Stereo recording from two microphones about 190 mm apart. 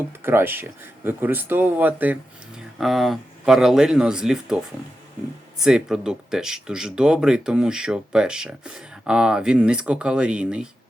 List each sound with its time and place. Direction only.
0.2 s speech: 10° right (ahead or behind)